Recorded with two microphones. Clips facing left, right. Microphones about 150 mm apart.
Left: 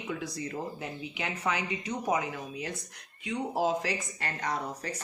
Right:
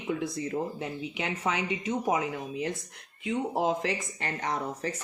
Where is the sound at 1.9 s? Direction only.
25° right (ahead or behind).